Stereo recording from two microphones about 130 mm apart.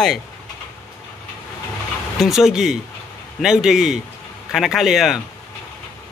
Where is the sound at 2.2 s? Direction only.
Centre (ahead or behind).